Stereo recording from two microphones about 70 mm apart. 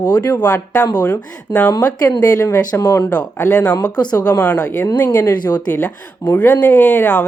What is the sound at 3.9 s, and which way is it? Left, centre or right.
Speech, left.